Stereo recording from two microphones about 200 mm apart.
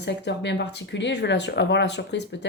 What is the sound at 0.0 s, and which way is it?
Speech, 60° left (ahead or behind).